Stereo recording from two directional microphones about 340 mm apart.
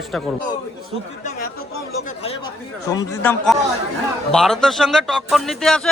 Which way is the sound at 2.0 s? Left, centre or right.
Centre.